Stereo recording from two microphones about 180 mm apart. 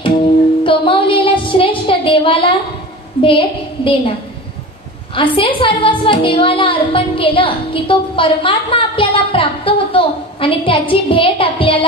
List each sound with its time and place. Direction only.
0.7 s a sound: 30° left (ahead or behind)
3.2 s a woman's voice: 30° left (ahead or behind)
5.1 s a woman's voice: 30° left (ahead or behind)